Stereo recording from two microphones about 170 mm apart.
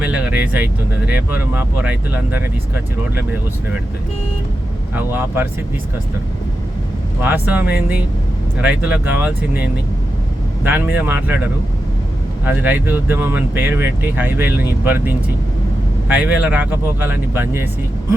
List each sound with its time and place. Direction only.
0.0 s vehicle: 10° right (ahead or behind)
1.0 s speech: 10° right (ahead or behind)
4.9 s speech: 10° right (ahead or behind)
7.2 s speech: 10° right (ahead or behind)
10.6 s speech: 10° right (ahead or behind)
12.5 s speech: 10° right (ahead or behind)